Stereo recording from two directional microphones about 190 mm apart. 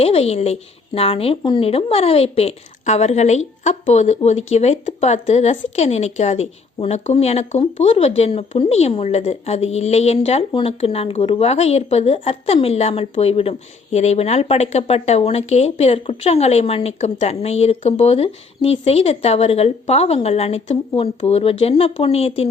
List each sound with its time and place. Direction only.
0.0 s speech: 30° left (ahead or behind)